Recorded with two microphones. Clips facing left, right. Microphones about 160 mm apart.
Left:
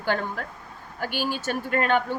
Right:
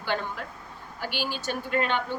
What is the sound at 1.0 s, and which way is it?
A woman's voice, 45° left (ahead or behind).